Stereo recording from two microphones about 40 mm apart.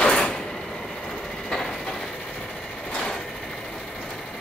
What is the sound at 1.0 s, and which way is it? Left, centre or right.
Train, centre.